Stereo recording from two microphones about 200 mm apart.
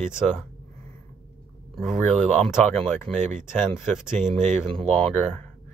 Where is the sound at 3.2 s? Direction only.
35° right (ahead or behind).